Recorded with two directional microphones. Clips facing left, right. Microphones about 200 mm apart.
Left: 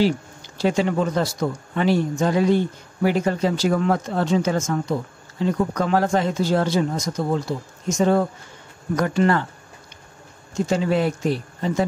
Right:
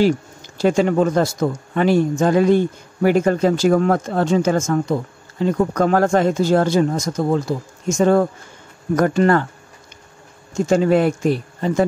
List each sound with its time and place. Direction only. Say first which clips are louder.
0.6 s speech: right 5 dB; 50° right (ahead or behind)
10.7 s speech: right 6 dB; 50° right (ahead or behind)